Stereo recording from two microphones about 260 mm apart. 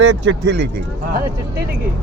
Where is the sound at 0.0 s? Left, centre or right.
Right.